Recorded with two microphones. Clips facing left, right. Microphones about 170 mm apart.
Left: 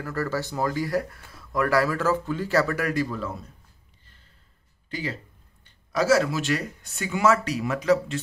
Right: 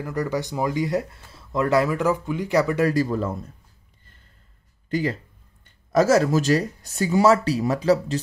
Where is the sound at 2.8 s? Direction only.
40° right (ahead or behind).